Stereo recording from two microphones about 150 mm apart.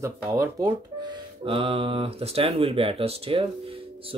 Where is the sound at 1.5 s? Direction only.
35° right (ahead or behind).